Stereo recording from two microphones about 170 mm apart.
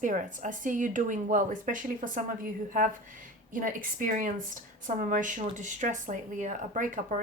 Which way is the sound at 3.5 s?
55° right (ahead or behind).